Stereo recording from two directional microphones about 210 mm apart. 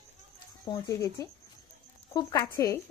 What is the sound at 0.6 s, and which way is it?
Speech, 15° left (ahead or behind).